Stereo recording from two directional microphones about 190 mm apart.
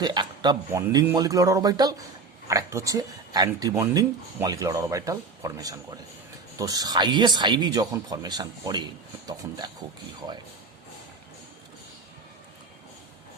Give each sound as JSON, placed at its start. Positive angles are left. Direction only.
{"t": 0.0, "sound": "speech", "side_deg": -20}